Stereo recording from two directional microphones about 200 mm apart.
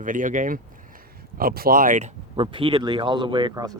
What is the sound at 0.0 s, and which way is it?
Speech, 40° right (ahead or behind).